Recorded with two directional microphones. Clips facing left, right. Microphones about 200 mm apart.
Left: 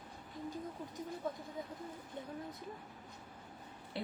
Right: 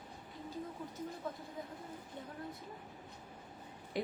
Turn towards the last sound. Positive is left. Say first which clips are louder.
# right 4 dB
turn(degrees=-15)  # may be behind; listen again after turning